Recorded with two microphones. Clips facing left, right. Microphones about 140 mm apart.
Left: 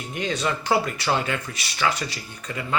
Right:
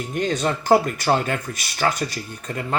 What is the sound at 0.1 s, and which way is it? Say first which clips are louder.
Speech: right 3 dB; 50° right (ahead or behind).